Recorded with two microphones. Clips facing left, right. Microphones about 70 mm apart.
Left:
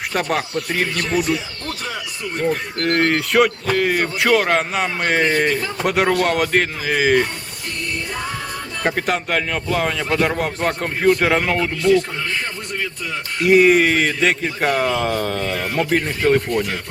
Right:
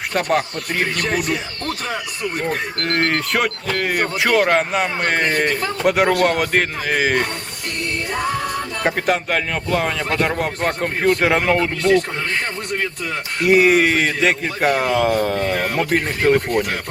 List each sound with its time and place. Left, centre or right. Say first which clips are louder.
0.1 s a man's voice: right 3 dB; centre
1.0 s speech: left 1 dB; right
2.8 s a man's voice: left 3 dB; centre
8.8 s a man's voice: right 1 dB; centre
13.4 s a man's voice: left 1 dB; centre